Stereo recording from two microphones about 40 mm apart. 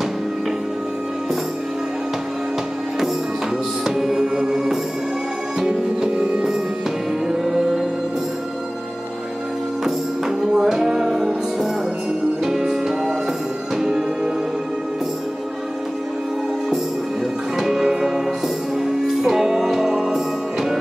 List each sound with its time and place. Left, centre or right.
3.8 s music: centre
9.8 s music: centre
12.4 s music: centre
17.6 s music: centre